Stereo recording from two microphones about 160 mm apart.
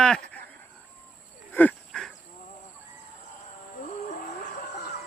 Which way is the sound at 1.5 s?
10° left (ahead or behind).